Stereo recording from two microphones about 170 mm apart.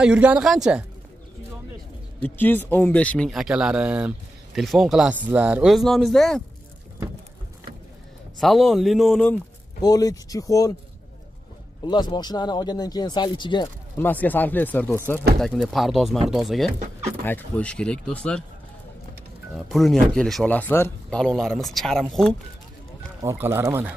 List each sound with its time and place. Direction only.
0.0 s speech: 5° right (ahead or behind)
2.2 s speech: 10° left (ahead or behind)
8.4 s speech: centre (ahead or behind)
9.8 s speech: 20° left (ahead or behind)
11.8 s speech: 25° left (ahead or behind)
13.9 s speech: 10° left (ahead or behind)
15.4 s speech: centre (ahead or behind)
17.2 s speech: 10° left (ahead or behind)
19.7 s speech: centre (ahead or behind)
23.2 s speech: 15° right (ahead or behind)